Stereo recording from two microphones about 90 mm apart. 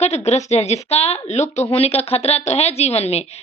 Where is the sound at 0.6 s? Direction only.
90° left.